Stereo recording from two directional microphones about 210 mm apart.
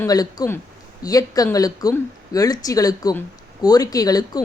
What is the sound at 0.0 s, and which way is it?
Speech, 15° left (ahead or behind).